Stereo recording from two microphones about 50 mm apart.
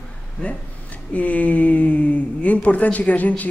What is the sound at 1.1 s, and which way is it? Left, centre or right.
Speech, left.